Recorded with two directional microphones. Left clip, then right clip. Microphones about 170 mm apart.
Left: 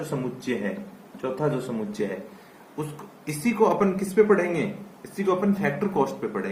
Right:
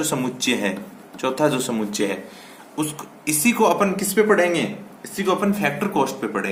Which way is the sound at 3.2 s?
35° right (ahead or behind).